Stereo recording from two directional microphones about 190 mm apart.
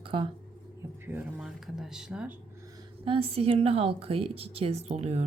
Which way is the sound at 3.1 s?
30° right (ahead or behind).